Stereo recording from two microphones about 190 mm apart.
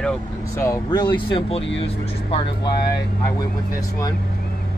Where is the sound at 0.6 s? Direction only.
20° left (ahead or behind).